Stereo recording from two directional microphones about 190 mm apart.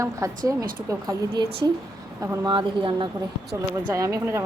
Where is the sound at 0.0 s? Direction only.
15° right (ahead or behind).